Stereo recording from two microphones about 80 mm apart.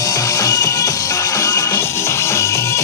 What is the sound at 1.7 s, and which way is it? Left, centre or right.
Music, left.